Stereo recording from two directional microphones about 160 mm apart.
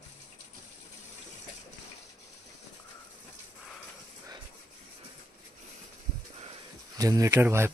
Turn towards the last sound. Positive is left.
turn(degrees=-15)  # may be behind; listen again after turning